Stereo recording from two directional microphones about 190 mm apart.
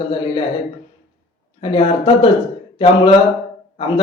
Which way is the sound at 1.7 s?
25° left (ahead or behind).